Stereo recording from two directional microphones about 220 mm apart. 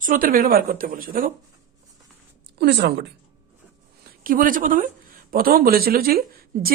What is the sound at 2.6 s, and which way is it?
Speech, 50° right (ahead or behind).